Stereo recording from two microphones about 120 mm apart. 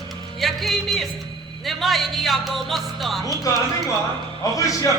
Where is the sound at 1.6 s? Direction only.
Centre (ahead or behind).